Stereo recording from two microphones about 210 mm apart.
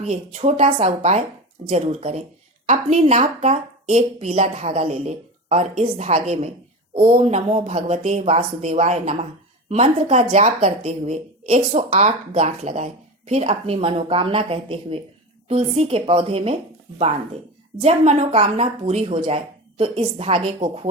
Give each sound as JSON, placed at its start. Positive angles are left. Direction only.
{"t": 0.0, "sound": "a woman's voice", "side_deg": -30}
{"t": 17.8, "sound": "a woman's voice", "side_deg": -30}